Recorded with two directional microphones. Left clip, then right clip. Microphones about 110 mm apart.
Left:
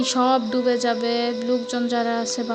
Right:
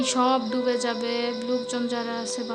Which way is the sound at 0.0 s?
25° left (ahead or behind).